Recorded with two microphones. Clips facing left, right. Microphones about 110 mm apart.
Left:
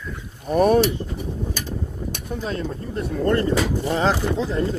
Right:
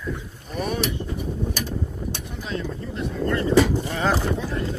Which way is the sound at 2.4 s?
45° left (ahead or behind).